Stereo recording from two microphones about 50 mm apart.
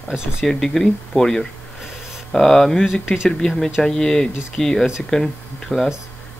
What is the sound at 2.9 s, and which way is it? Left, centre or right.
Speech, centre.